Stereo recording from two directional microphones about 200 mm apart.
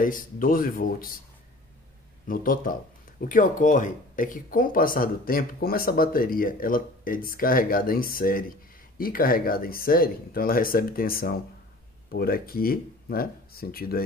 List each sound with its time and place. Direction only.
0.0 s speech: 45° left (ahead or behind)
2.2 s speech: 45° left (ahead or behind)